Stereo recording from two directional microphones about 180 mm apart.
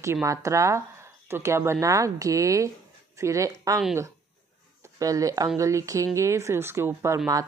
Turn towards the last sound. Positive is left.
turn(degrees=-20)  # may be behind; listen again after turning